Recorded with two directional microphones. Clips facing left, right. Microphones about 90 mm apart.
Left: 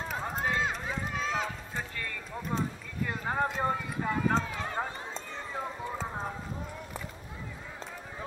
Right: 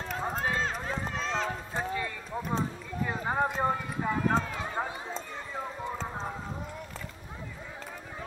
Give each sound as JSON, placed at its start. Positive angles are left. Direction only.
{"t": 0.2, "sound": "run", "side_deg": -10}
{"t": 0.8, "sound": "run", "side_deg": 5}
{"t": 2.0, "sound": "clip-clop", "side_deg": -15}
{"t": 3.1, "sound": "speech", "side_deg": -10}
{"t": 4.6, "sound": "run", "side_deg": -10}